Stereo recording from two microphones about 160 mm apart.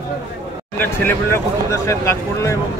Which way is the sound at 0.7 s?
15° left (ahead or behind).